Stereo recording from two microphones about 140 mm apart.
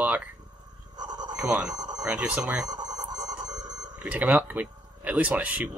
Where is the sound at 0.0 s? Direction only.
10° right (ahead or behind).